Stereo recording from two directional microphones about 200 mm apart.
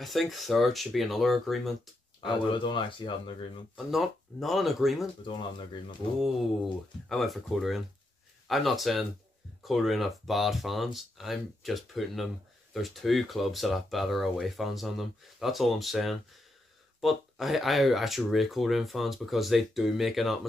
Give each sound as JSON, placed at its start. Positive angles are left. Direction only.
{"t": 0.0, "sound": "speech", "side_deg": 0}
{"t": 2.2, "sound": "speech", "side_deg": 25}
{"t": 3.7, "sound": "speech", "side_deg": 0}
{"t": 7.1, "sound": "speech", "side_deg": 0}